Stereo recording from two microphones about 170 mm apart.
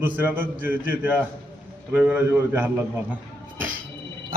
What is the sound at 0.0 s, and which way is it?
A man's voice, 10° right (ahead or behind).